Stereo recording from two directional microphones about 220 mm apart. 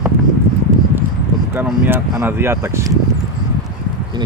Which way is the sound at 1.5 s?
10° right (ahead or behind).